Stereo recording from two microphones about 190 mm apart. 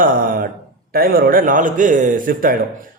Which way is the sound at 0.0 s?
45° right (ahead or behind).